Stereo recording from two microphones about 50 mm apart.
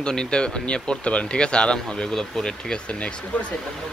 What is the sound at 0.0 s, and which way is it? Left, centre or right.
Speech, centre.